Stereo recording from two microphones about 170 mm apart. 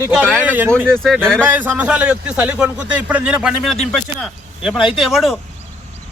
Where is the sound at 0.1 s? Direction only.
Centre (ahead or behind).